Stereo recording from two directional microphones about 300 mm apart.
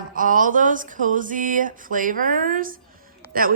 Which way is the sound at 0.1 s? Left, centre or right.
Right.